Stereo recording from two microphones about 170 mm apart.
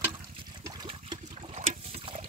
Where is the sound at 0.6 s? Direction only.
20° right (ahead or behind).